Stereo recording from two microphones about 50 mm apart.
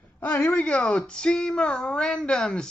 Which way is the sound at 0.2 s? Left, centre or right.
Left.